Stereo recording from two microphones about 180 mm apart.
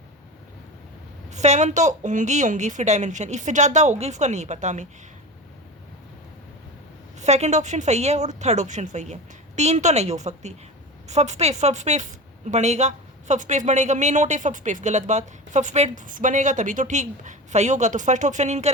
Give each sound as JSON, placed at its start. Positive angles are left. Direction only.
{"t": 1.3, "sound": "a woman's voice", "side_deg": -40}
{"t": 7.2, "sound": "a woman's voice", "side_deg": -40}